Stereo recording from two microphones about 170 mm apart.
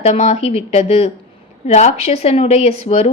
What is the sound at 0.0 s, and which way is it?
A woman's voice, 40° left (ahead or behind).